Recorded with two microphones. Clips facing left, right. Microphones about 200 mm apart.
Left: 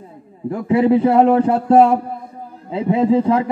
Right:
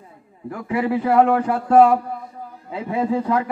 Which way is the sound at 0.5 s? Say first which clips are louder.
Left 8 dB; 25° left (ahead or behind).